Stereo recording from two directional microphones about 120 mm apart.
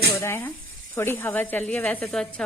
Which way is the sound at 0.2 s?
20° left (ahead or behind).